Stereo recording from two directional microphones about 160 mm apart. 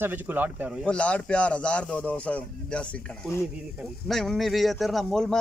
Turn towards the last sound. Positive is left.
turn(degrees=0)  # may be behind; listen again after turning